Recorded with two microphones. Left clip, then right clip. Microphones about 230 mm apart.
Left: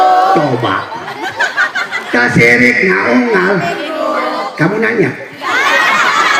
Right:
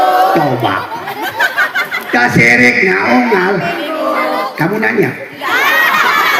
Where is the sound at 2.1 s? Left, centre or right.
Right.